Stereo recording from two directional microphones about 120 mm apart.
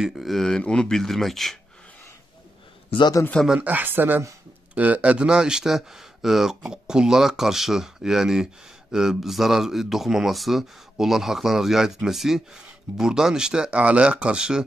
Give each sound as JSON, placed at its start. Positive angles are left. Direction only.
{"t": 0.0, "sound": "speech", "side_deg": 0}
{"t": 2.9, "sound": "a man's voice", "side_deg": 40}
{"t": 3.4, "sound": "speech", "side_deg": -10}